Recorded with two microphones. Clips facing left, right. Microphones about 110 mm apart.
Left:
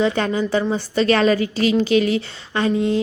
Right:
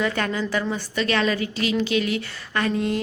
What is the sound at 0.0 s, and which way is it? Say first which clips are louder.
A woman's voice: left 5 dB; 25° left (ahead or behind).